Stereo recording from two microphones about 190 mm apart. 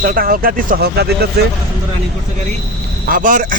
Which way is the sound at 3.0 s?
45° right (ahead or behind).